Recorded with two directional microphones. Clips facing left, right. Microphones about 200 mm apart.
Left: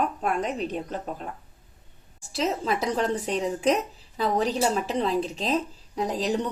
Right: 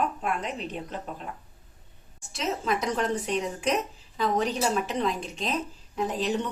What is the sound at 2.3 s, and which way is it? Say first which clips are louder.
A woman's voice: left 2 dB; 30° left (ahead or behind).